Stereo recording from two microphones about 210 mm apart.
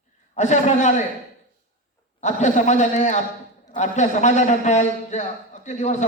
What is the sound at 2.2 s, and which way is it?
Speech, 35° left (ahead or behind).